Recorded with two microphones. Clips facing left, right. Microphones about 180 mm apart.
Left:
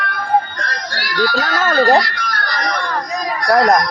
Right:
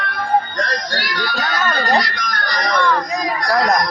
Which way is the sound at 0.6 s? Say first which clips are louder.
Right 3 dB; 20° right (ahead or behind).